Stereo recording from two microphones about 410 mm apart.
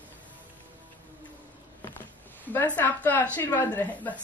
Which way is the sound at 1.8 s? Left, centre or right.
Centre.